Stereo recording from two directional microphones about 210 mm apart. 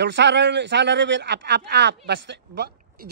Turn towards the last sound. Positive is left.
turn(degrees=-50)  # may be behind; listen again after turning